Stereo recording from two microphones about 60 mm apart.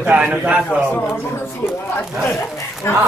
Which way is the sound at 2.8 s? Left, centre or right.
Left.